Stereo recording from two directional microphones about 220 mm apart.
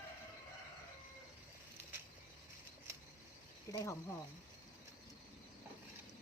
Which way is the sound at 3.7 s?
15° left (ahead or behind).